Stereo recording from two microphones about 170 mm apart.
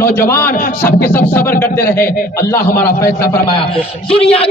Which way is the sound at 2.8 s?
65° left (ahead or behind).